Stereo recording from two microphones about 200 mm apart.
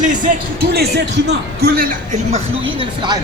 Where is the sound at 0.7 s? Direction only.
55° right (ahead or behind).